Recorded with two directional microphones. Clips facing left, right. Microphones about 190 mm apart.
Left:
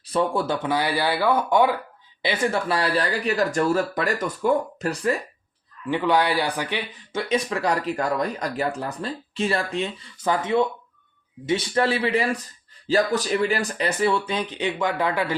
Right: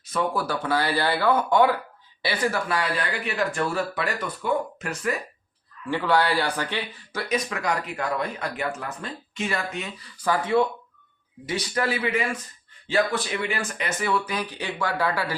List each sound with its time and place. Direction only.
0.0 s speech: 30° left (ahead or behind)
5.9 s speech: 15° left (ahead or behind)